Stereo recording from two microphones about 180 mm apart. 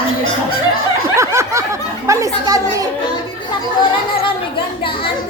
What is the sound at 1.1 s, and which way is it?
Snicker, 15° right (ahead or behind).